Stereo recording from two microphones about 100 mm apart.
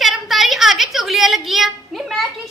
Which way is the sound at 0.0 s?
Centre (ahead or behind).